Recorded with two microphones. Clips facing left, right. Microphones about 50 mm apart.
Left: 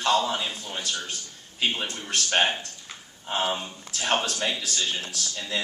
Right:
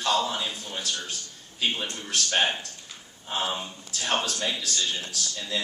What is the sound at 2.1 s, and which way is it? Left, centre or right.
A man's voice, centre.